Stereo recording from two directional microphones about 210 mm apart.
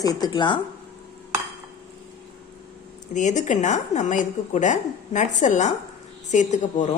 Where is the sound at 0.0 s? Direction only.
20° left (ahead or behind).